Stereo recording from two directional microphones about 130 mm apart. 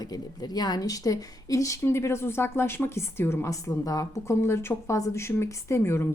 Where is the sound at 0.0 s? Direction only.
30° left (ahead or behind).